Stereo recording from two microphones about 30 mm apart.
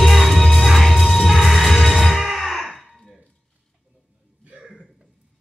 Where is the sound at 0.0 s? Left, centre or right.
Centre.